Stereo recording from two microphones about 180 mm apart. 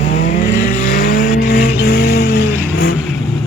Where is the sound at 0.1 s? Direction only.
45° left (ahead or behind).